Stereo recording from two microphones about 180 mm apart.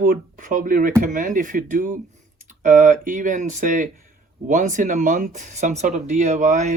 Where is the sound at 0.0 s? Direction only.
50° right (ahead or behind).